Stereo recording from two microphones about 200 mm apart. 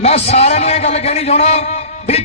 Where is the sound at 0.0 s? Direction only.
30° left (ahead or behind).